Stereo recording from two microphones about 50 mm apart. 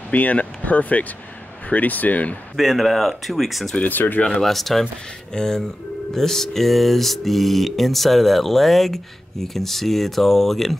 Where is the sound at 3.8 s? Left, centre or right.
Left.